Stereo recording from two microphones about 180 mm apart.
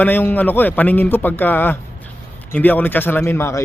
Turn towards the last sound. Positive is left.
turn(degrees=15)  # may be behind; listen again after turning